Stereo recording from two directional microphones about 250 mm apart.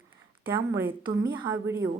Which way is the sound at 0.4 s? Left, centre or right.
Centre.